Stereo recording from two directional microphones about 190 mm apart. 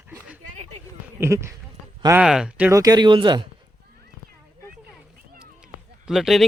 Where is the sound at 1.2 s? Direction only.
15° right (ahead or behind).